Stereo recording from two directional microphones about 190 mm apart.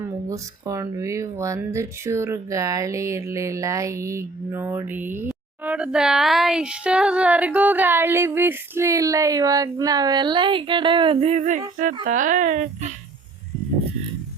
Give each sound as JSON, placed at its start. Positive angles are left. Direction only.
{"t": 0.3, "sound": "speech", "side_deg": -15}